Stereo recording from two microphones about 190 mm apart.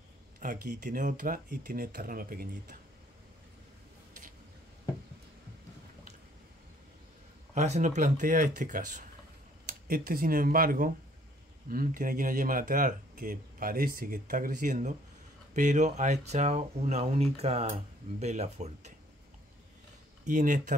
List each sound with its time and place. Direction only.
0.4 s speech: 45° right (ahead or behind)
7.5 s speech: 35° right (ahead or behind)
20.2 s speech: 40° right (ahead or behind)